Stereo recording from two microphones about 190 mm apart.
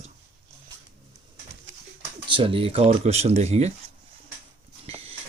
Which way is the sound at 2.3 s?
25° right (ahead or behind).